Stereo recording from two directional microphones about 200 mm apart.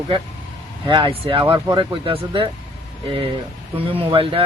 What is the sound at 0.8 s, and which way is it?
Speech, 25° right (ahead or behind).